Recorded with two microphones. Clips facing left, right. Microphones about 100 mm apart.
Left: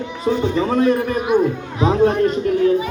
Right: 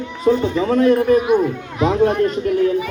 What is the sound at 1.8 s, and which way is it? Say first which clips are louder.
Speech: even; 30° left (ahead or behind).